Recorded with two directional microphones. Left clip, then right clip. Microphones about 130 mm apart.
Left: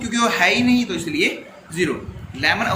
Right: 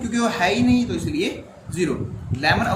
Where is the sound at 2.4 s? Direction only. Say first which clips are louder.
Left 1 dB; 50° right (ahead or behind).